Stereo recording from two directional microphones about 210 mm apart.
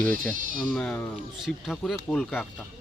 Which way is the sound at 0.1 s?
40° right (ahead or behind).